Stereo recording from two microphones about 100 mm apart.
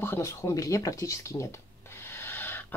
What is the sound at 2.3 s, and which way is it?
Snort, 20° left (ahead or behind).